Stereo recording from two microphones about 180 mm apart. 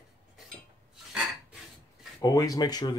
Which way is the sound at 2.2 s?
20° left (ahead or behind).